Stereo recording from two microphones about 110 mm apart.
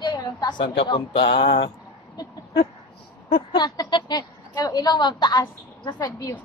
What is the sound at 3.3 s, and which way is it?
A woman's voice, 40° left (ahead or behind).